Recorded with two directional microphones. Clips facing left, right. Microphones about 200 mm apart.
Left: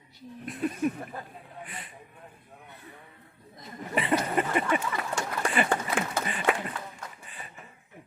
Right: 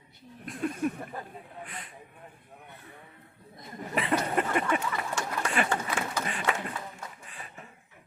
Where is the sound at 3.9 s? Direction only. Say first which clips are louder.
Left 1 dB; centre (ahead or behind).